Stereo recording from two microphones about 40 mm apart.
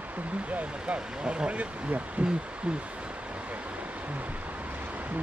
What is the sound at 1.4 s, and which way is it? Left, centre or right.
Speech, right.